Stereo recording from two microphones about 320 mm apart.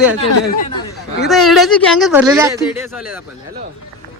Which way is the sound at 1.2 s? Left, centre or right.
Centre.